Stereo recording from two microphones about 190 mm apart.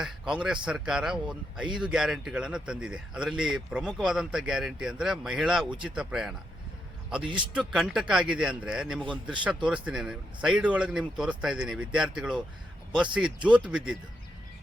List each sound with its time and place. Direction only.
0.0 s speech: 5° right (ahead or behind)
7.3 s speech: 25° right (ahead or behind)
7.7 s speech: 5° right (ahead or behind)